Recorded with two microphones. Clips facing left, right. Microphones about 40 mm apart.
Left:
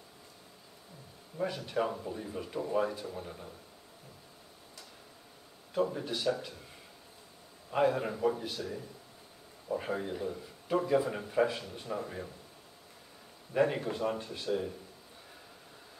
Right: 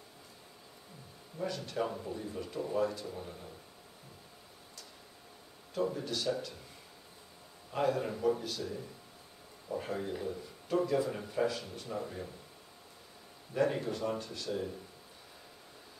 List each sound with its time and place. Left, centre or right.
1.4 s a man's voice: left
5.9 s a man's voice: centre
7.7 s a man's voice: left
13.5 s a man's voice: left